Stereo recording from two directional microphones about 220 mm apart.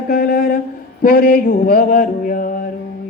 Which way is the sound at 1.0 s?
40° left (ahead or behind).